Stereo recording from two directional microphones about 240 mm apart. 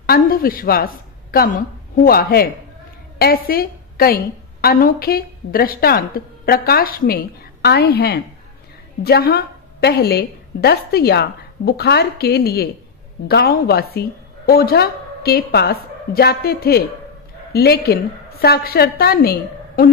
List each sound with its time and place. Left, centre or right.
0.0 s a woman's voice: left